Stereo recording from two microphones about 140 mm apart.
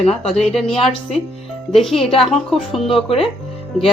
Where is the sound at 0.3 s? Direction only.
Centre (ahead or behind).